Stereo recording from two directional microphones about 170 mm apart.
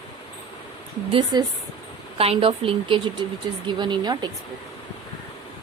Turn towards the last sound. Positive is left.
turn(degrees=-25)  # may be behind; listen again after turning